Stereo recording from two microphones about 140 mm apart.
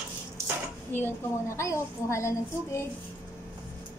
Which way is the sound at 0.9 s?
15° left (ahead or behind).